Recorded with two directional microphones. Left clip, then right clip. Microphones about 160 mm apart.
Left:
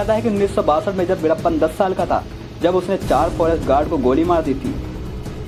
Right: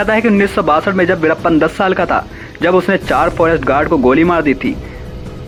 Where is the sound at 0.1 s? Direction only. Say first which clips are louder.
Right 4 dB; 30° right (ahead or behind).